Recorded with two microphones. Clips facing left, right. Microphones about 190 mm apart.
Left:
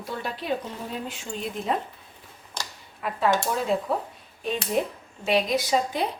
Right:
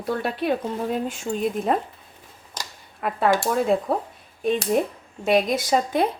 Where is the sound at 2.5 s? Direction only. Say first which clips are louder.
Even; 50° right (ahead or behind).